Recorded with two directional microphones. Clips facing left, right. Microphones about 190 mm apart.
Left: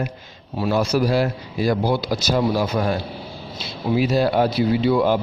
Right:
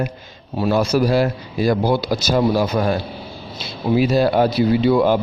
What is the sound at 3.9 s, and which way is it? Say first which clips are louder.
Speech: right 3 dB; 50° right (ahead or behind).